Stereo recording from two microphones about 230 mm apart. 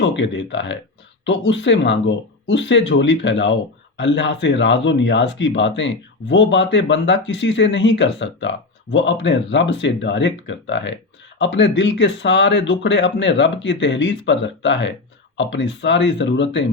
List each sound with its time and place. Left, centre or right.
0.0 s speech: left